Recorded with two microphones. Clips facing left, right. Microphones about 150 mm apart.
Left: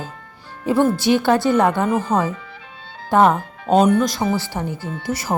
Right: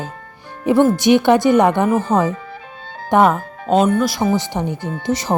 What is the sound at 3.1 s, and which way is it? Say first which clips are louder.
Speech: right 1 dB; 15° right (ahead or behind).